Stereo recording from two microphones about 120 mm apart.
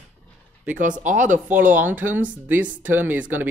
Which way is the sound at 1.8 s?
15° right (ahead or behind).